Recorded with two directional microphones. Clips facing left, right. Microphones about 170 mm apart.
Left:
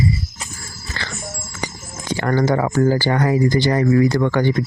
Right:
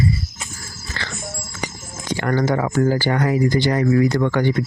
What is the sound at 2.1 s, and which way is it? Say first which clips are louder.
Speech: left 2 dB; 30° left (ahead or behind).